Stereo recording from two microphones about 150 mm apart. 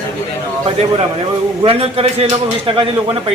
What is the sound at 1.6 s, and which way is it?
Speech, 40° right (ahead or behind).